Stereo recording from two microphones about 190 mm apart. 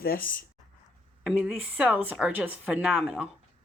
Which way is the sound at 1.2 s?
5° right (ahead or behind).